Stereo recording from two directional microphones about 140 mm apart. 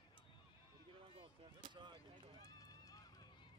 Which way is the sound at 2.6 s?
25° left (ahead or behind).